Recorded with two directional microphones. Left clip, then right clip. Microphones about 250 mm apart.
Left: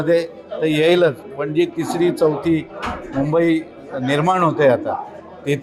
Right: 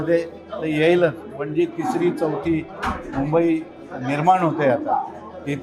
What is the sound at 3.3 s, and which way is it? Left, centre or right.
A man's voice, left.